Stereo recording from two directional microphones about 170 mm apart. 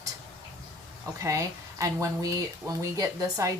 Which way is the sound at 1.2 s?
20° right (ahead or behind).